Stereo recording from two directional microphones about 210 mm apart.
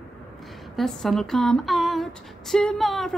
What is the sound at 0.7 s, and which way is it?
Speech, centre (ahead or behind).